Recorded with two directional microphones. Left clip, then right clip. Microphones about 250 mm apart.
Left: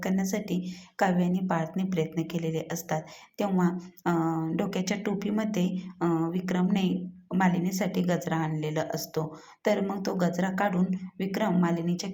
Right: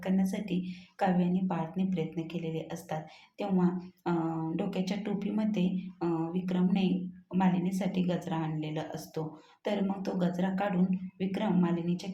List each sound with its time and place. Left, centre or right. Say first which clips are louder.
0.0 s a woman's voice: left 3 dB; centre